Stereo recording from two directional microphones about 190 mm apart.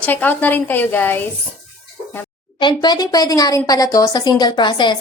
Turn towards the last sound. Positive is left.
turn(degrees=25)  # may be behind; listen again after turning